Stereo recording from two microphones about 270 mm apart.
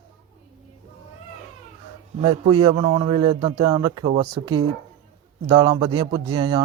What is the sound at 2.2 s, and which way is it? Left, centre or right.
A man's voice, centre.